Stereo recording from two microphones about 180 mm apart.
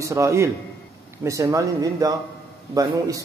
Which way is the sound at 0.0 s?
15° right (ahead or behind).